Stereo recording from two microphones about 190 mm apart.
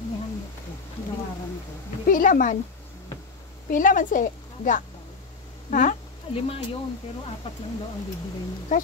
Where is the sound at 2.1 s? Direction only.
45° left (ahead or behind).